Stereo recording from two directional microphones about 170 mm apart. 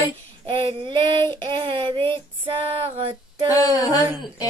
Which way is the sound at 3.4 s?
20° left (ahead or behind).